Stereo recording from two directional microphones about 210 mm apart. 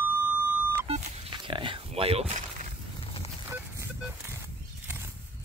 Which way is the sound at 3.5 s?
10° right (ahead or behind).